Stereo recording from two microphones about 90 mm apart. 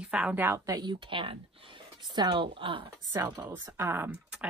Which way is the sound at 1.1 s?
75° right (ahead or behind).